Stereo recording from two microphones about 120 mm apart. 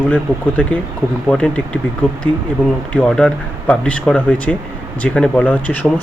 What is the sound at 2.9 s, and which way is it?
Speech, 10° left (ahead or behind).